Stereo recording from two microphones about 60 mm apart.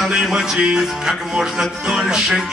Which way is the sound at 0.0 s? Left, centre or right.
Centre.